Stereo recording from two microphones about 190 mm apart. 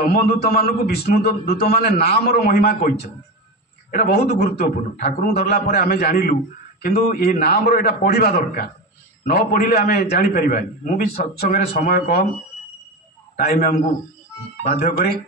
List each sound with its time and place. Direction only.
0.4 s a man's voice: 55° left (ahead or behind)
3.9 s a man's voice: 50° left (ahead or behind)
13.4 s a man's voice: 45° left (ahead or behind)